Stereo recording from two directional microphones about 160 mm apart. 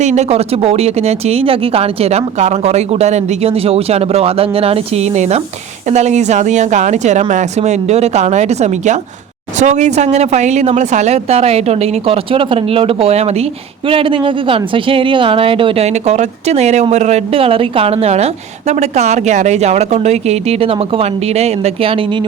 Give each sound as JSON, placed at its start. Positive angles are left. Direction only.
{"t": 0.0, "sound": "speech", "side_deg": -45}